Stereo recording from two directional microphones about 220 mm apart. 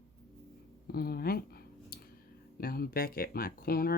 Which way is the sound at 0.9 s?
45° left (ahead or behind).